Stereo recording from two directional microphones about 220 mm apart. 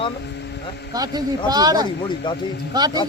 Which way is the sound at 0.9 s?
15° right (ahead or behind).